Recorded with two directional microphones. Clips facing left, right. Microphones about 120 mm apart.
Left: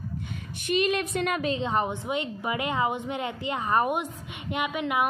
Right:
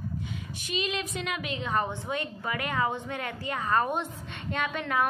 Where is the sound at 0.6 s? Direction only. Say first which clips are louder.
Left 7 dB; 55° left (ahead or behind).